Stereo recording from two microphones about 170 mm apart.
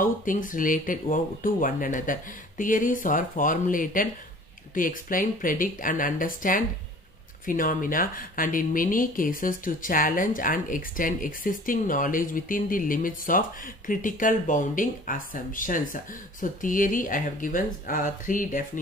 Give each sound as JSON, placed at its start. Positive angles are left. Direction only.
{"t": 0.0, "sound": "speech", "side_deg": 50}